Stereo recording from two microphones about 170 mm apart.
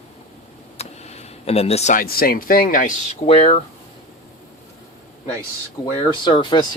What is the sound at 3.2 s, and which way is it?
Speech, 35° left (ahead or behind).